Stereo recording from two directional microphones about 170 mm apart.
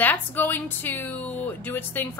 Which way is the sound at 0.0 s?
10° left (ahead or behind).